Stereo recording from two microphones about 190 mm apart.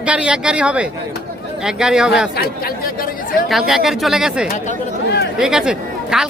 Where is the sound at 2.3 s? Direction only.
55° left (ahead or behind).